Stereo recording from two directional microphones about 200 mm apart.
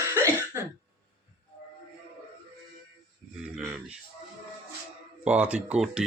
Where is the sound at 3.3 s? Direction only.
5° right (ahead or behind).